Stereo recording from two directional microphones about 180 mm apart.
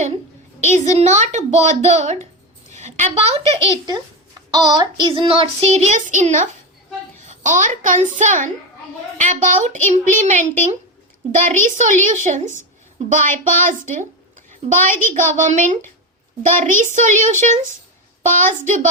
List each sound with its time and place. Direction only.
0.7 s child singing: 40° right (ahead or behind)
2.6 s a woman's voice: 40° right (ahead or behind)
4.5 s child singing: 25° right (ahead or behind); by 6.5 s 45° right (ahead or behind)
7.2 s a woman's voice: 40° right (ahead or behind)
14.6 s child singing: 40° right (ahead or behind)
15.1 s a child's voice: 45° right (ahead or behind)